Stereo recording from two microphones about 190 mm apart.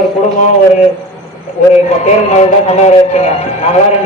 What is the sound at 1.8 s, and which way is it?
A man's voice, 35° left (ahead or behind).